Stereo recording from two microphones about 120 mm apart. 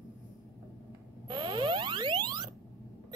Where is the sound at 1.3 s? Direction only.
40° right (ahead or behind).